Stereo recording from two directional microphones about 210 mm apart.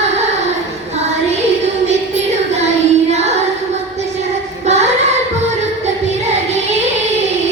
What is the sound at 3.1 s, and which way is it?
Child singing, 30° right (ahead or behind).